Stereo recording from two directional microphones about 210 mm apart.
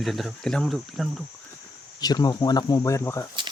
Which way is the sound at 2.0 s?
20° left (ahead or behind).